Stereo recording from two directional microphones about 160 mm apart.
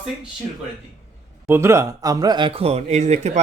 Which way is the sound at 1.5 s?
15° right (ahead or behind).